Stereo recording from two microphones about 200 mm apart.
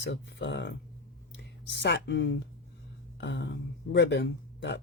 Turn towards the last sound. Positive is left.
turn(degrees=60)  # may be behind; listen again after turning